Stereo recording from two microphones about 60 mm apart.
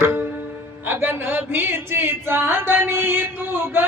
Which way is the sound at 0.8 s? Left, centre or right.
Right.